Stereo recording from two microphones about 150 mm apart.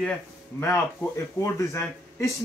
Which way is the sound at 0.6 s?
15° left (ahead or behind).